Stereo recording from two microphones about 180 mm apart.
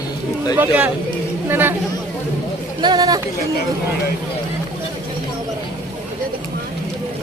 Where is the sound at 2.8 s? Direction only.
25° right (ahead or behind).